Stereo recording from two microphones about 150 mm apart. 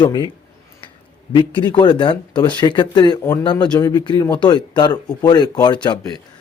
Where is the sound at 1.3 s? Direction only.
30° left (ahead or behind).